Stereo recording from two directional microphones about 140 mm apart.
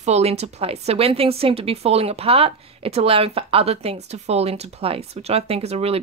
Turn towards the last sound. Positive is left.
turn(degrees=-45)  # may be behind; listen again after turning